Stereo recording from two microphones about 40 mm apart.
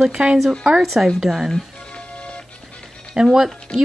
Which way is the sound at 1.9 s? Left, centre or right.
Left.